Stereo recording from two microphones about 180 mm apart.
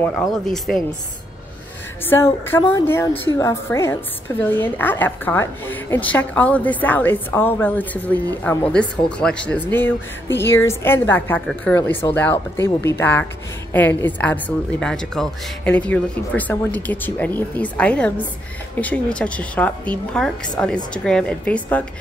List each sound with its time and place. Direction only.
0.3 s speech: centre (ahead or behind)
2.0 s a woman's voice: 15° left (ahead or behind)